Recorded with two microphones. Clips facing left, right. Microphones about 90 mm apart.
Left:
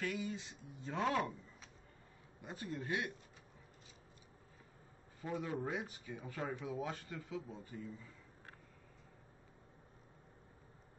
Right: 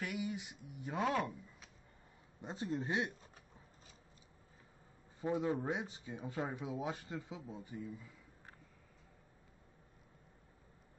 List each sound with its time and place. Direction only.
0.0 s speech: 15° right (ahead or behind)
2.4 s speech: 25° right (ahead or behind)
5.2 s speech: 25° right (ahead or behind)